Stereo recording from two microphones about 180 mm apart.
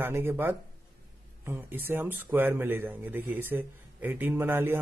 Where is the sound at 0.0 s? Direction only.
10° right (ahead or behind).